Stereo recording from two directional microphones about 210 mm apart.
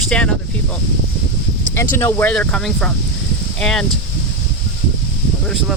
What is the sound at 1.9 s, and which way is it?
Speech, 10° left (ahead or behind).